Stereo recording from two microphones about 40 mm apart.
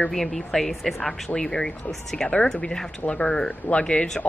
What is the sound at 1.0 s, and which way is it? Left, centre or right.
Speech, left.